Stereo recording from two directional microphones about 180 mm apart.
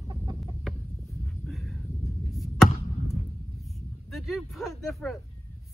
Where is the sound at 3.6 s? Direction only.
Centre (ahead or behind).